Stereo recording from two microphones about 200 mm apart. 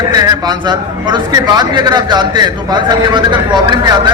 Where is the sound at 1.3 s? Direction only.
20° right (ahead or behind).